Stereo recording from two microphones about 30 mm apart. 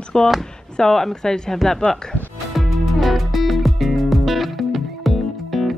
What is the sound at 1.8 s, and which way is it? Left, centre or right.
Speech, left.